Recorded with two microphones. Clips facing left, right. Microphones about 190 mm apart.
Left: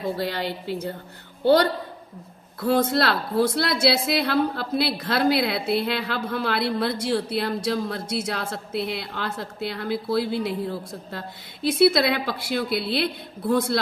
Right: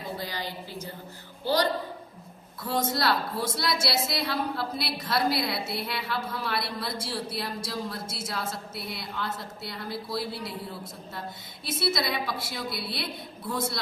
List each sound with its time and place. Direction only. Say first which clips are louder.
0.0 s a woman's voice: left 8 dB; 65° left (ahead or behind)